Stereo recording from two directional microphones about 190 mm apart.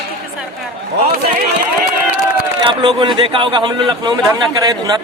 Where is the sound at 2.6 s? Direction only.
25° right (ahead or behind).